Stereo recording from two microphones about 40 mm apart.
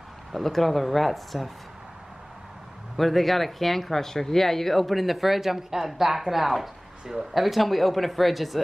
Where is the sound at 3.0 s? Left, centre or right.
Centre.